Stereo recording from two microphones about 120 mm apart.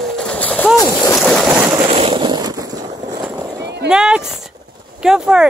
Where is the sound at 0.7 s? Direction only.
30° left (ahead or behind).